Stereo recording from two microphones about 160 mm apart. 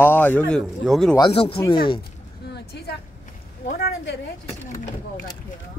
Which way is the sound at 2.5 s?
90° left.